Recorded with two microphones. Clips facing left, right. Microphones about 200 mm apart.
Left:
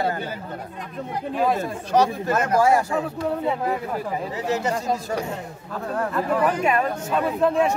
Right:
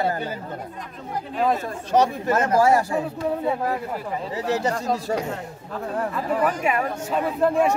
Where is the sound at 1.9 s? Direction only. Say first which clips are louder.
Right 1 dB; 25° right (ahead or behind).